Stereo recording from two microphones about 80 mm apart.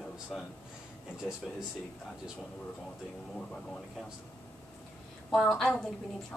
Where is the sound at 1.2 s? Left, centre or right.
Centre.